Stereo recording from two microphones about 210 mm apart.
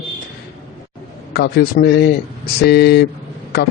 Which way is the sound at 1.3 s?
50° left (ahead or behind).